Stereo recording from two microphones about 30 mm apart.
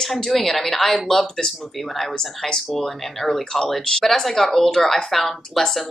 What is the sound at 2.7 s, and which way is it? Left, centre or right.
Speech, centre.